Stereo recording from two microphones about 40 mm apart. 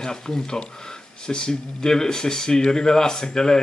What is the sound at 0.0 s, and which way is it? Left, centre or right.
Speech, centre.